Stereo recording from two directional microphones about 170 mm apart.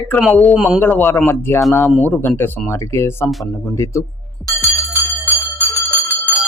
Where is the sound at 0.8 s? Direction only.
10° left (ahead or behind).